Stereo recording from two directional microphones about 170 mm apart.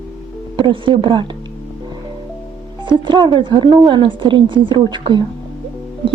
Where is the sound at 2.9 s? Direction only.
25° right (ahead or behind).